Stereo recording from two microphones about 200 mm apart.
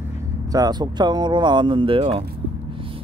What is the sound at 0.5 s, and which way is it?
Speech, 20° right (ahead or behind).